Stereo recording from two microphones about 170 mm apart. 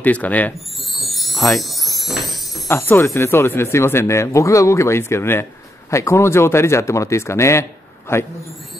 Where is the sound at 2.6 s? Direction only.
15° left (ahead or behind).